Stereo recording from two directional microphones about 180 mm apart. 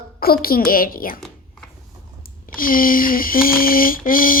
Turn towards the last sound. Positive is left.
turn(degrees=50)  # may be behind; listen again after turning